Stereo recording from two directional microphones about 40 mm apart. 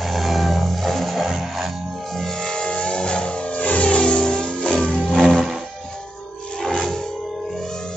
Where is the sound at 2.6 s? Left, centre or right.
Left.